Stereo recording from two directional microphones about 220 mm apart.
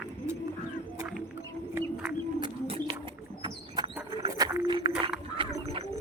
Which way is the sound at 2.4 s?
20° right (ahead or behind).